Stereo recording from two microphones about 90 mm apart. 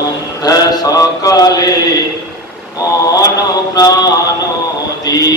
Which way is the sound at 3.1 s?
40° left (ahead or behind).